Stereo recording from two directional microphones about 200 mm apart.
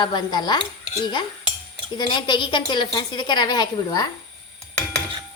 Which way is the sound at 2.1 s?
25° left (ahead or behind).